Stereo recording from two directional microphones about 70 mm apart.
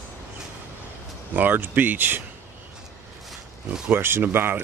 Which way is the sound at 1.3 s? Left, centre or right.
Right.